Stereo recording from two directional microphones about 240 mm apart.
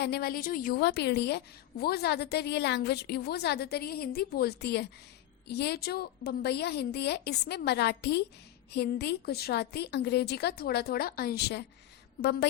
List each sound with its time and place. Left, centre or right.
0.0 s a woman's voice: left